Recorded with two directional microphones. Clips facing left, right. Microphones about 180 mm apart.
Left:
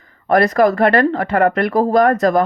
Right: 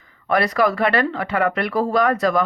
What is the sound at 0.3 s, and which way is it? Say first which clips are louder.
Speech: left 5 dB; 45° left (ahead or behind).